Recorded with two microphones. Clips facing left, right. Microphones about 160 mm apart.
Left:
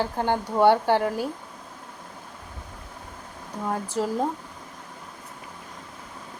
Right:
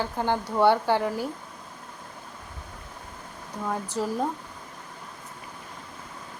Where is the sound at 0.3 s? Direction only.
15° left (ahead or behind).